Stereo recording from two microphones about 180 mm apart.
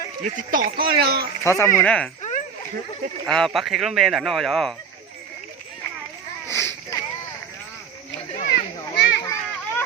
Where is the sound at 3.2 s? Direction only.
Centre (ahead or behind).